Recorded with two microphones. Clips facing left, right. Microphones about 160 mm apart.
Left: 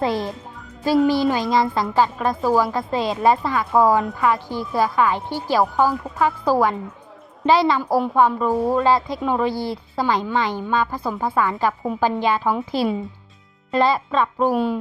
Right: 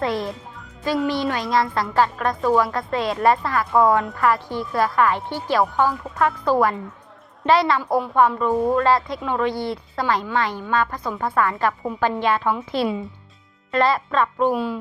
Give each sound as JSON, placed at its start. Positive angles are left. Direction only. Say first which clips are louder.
{"t": 0.0, "sound": "a woman's voice", "louder": "left 1 dB", "side_deg": 0}
{"t": 13.7, "sound": "a woman's voice", "louder": "left 1 dB", "side_deg": 0}